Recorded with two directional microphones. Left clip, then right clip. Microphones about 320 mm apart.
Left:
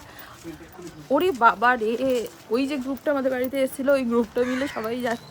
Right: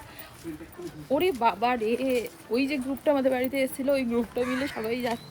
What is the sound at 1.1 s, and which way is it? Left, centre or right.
Speech, centre.